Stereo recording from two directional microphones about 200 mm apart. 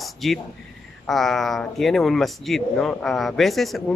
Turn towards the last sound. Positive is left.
turn(degrees=0)  # may be behind; listen again after turning